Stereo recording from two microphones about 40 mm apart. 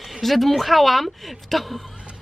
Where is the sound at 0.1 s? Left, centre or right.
Centre.